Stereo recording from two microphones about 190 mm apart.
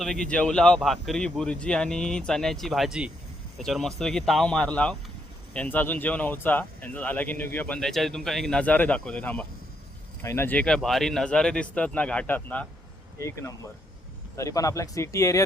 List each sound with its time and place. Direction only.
0.0 s speech: 5° left (ahead or behind)